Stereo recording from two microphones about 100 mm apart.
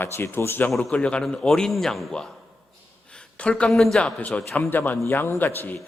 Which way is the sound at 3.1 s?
10° left (ahead or behind).